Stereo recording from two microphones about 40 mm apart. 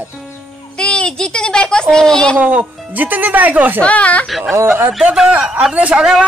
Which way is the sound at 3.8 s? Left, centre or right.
Left.